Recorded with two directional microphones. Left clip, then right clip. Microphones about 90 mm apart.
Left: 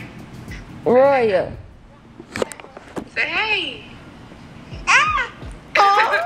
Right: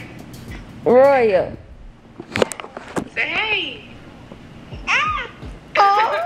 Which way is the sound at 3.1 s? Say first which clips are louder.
Left 1 dB; centre (ahead or behind).